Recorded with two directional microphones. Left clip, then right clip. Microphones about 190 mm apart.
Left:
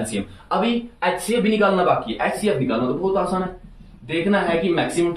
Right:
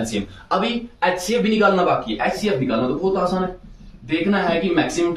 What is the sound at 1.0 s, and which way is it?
Speech, 15° right (ahead or behind).